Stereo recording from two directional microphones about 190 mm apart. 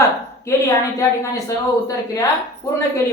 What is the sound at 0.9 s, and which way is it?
Speech, 15° left (ahead or behind).